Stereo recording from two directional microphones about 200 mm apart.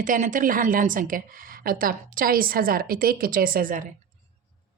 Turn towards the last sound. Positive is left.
turn(degrees=-45)  # may be behind; listen again after turning